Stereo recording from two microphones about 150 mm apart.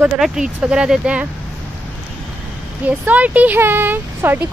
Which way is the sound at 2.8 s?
10° right (ahead or behind).